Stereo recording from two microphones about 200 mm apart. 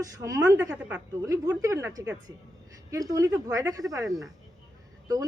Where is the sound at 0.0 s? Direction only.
15° right (ahead or behind).